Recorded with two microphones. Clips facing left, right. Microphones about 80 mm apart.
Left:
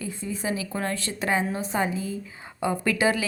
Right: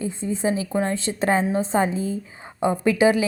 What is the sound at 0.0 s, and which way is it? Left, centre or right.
A woman's voice, right.